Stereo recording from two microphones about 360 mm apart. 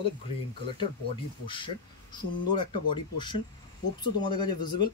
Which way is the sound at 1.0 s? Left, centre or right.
Centre.